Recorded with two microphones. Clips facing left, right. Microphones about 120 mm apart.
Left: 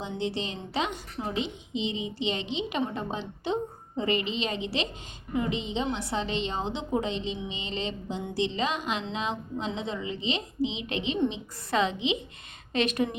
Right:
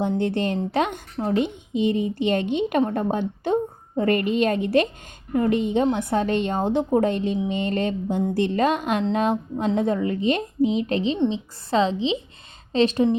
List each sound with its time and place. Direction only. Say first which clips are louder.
0.1 s a woman's voice: right 9 dB; 50° right (ahead or behind); by 13.1 s 30° right (ahead or behind)